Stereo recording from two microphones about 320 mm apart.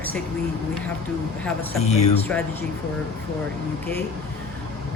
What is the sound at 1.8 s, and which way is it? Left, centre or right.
Speech, centre.